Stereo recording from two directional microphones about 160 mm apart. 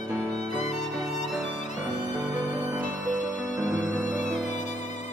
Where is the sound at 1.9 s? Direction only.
10° right (ahead or behind).